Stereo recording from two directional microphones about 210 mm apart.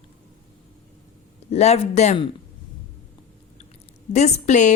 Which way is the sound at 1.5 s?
30° left (ahead or behind).